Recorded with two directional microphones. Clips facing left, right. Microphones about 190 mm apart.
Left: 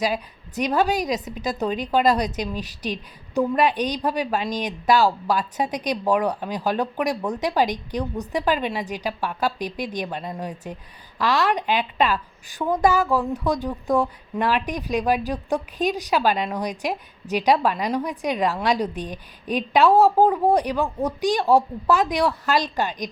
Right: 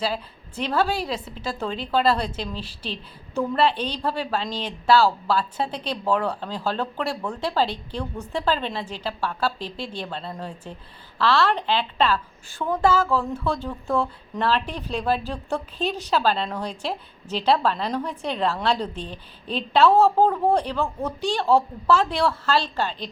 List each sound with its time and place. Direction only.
0.0 s a woman's voice: 15° left (ahead or behind)